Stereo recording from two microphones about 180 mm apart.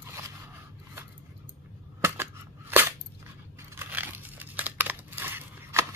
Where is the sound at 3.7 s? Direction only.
10° right (ahead or behind).